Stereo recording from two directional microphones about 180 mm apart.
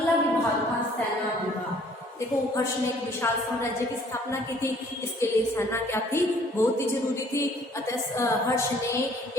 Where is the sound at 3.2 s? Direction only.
15° left (ahead or behind).